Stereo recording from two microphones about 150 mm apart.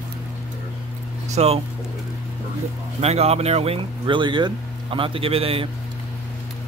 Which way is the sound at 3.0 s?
45° right (ahead or behind).